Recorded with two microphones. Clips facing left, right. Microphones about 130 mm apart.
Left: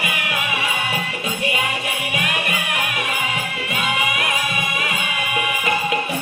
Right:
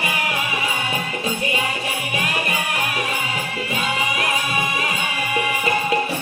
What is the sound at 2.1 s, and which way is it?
Music, 35° right (ahead or behind).